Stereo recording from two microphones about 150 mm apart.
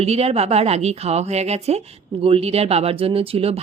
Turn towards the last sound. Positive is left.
turn(degrees=-40)  # may be behind; listen again after turning